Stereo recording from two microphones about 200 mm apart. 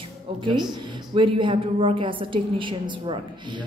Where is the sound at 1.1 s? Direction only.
25° right (ahead or behind).